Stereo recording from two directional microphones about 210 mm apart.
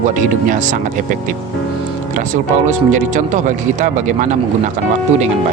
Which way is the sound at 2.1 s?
40° right (ahead or behind).